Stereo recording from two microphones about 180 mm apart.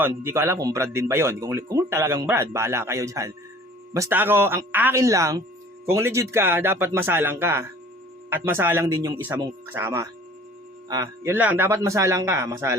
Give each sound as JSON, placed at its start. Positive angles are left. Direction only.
{"t": 0.0, "sound": "speech", "side_deg": -15}